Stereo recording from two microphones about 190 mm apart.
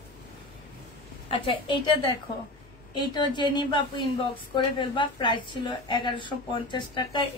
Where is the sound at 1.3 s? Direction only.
30° left (ahead or behind).